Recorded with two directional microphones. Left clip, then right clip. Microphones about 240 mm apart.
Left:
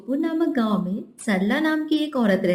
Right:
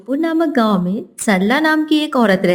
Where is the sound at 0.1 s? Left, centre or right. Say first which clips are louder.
Right 7 dB; right.